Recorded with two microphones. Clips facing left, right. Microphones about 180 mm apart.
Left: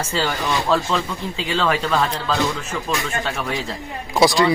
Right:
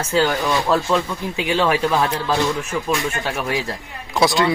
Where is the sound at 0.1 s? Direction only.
Centre (ahead or behind).